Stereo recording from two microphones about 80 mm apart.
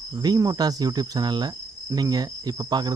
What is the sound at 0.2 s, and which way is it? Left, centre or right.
Cricket, right.